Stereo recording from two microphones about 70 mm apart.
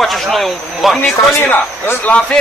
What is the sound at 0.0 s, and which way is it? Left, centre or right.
Speech, centre.